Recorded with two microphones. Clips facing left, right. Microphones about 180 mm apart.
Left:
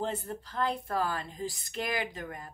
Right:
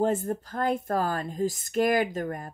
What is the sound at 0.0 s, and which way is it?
Speech, 45° right (ahead or behind).